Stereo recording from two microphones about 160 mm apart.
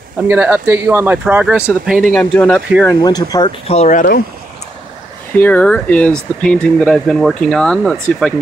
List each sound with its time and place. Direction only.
0.3 s speech: 10° right (ahead or behind)
2.1 s speech: 5° left (ahead or behind)
2.9 s speech: 25° left (ahead or behind)
3.6 s speech: 45° left (ahead or behind)
5.3 s speech: 10° left (ahead or behind)